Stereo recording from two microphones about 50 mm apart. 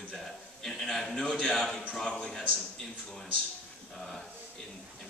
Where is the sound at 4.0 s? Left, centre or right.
Centre.